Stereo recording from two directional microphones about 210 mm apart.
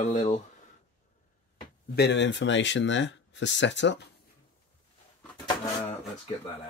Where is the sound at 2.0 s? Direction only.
55° left (ahead or behind).